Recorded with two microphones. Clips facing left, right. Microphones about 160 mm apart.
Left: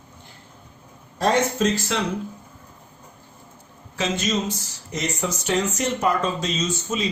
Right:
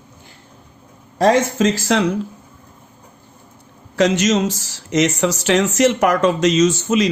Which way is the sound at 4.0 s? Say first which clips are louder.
Right 9 dB; 75° right (ahead or behind).